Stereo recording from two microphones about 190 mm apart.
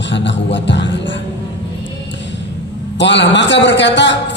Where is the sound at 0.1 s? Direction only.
70° left (ahead or behind).